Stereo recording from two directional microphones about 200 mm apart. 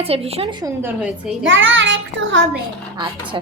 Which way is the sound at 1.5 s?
70° right (ahead or behind).